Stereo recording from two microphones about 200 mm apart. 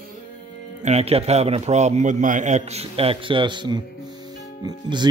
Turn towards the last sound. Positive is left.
turn(degrees=-20)  # may be behind; listen again after turning